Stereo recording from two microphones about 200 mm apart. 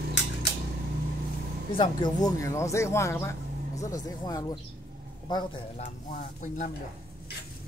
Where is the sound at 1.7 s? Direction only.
25° left (ahead or behind).